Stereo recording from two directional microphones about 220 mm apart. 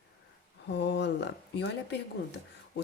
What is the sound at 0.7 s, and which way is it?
Speech, 50° left (ahead or behind).